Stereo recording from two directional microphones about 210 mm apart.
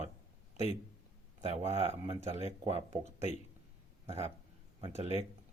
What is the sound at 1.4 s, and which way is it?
Speech, 30° right (ahead or behind).